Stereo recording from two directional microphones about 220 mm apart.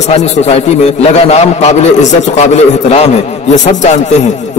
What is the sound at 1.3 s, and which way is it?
A man's voice, 30° left (ahead or behind).